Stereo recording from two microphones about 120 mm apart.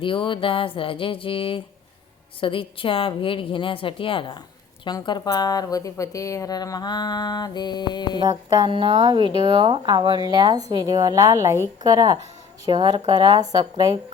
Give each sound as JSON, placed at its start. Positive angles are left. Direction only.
{"t": 0.0, "sound": "a woman's voice", "side_deg": 45}
{"t": 8.2, "sound": "speech", "side_deg": -35}